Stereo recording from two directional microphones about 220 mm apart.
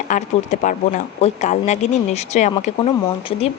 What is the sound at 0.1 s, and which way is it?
Speech, 35° left (ahead or behind).